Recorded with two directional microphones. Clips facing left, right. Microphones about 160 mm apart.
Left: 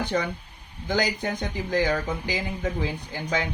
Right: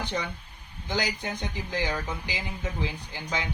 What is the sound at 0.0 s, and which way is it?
Speech, 50° left (ahead or behind).